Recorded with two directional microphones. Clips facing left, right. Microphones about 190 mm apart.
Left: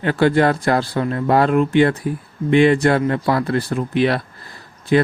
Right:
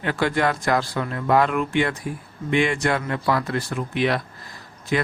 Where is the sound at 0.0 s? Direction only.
35° left (ahead or behind).